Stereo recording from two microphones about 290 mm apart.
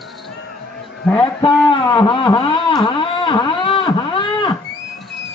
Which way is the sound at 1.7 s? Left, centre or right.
Centre.